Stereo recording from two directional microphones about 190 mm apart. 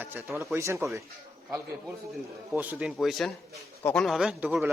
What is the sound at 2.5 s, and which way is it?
A man's voice, 10° right (ahead or behind).